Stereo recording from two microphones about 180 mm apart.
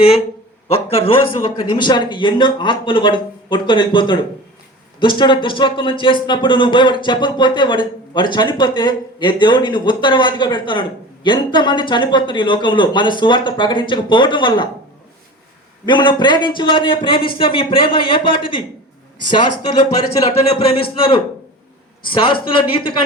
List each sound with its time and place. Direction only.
0.7 s speech: 35° left (ahead or behind)
15.9 s speech: 25° left (ahead or behind)
20.1 s speech: 30° left (ahead or behind)